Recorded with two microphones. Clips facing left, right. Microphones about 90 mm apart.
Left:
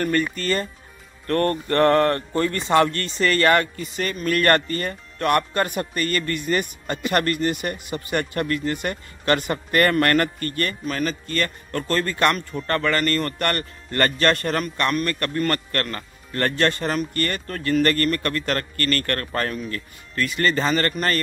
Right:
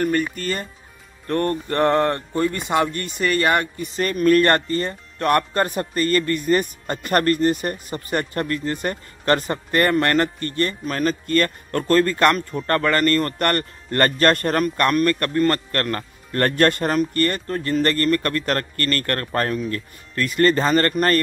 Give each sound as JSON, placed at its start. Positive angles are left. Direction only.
{"t": 0.0, "sound": "speech", "side_deg": -10}
{"t": 4.0, "sound": "a man's voice", "side_deg": -45}
{"t": 4.4, "sound": "speech", "side_deg": -25}
{"t": 10.9, "sound": "a man's voice", "side_deg": -40}
{"t": 15.9, "sound": "a man's voice", "side_deg": -50}
{"t": 17.1, "sound": "a man's voice", "side_deg": -35}